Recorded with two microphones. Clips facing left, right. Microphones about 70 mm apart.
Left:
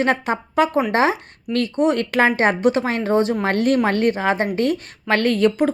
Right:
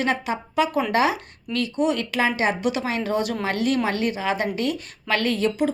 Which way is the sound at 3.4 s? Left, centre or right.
Left.